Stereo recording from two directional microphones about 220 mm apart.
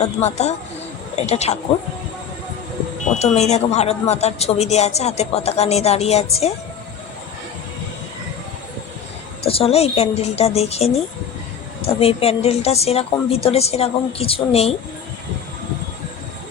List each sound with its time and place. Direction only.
0.0 s a woman's voice: 30° left (ahead or behind)
3.1 s a woman's voice: 30° left (ahead or behind)
9.4 s a woman's voice: 25° left (ahead or behind)